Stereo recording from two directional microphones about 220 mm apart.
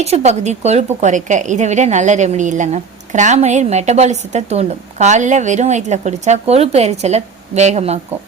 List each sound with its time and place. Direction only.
0.0 s a woman's voice: 30° right (ahead or behind)